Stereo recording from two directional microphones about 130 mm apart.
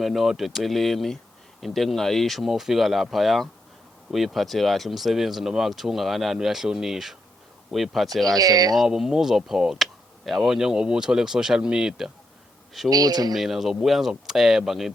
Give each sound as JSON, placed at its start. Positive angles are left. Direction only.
{"t": 0.0, "sound": "speech", "side_deg": 0}
{"t": 8.4, "sound": "speech", "side_deg": -30}
{"t": 8.7, "sound": "speech", "side_deg": 0}
{"t": 12.9, "sound": "speech", "side_deg": -30}
{"t": 13.3, "sound": "speech", "side_deg": 0}